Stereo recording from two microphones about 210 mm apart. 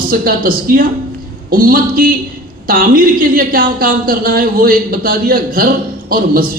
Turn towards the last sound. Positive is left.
turn(degrees=-45)  # may be behind; listen again after turning